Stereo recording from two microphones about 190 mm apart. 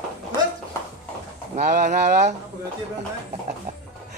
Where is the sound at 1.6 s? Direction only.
40° right (ahead or behind).